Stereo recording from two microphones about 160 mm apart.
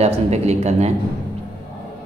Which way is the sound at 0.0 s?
40° right (ahead or behind).